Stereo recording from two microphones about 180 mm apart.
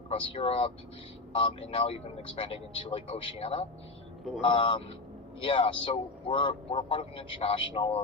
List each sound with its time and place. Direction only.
0.1 s a man's voice: 30° left (ahead or behind)